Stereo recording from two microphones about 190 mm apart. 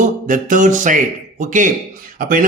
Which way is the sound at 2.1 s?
45° right (ahead or behind).